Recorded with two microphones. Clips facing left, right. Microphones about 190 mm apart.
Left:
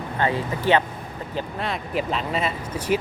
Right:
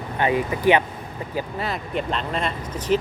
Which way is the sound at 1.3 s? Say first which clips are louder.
Right 1 dB; centre (ahead or behind).